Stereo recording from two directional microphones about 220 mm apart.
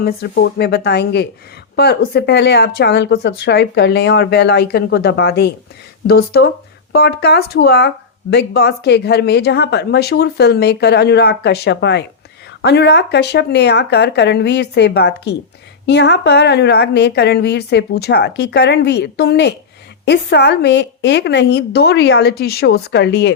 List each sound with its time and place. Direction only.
0.0 s speech: 45° left (ahead or behind)